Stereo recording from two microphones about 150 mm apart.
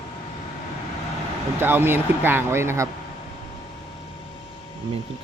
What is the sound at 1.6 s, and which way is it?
Speech, 15° right (ahead or behind).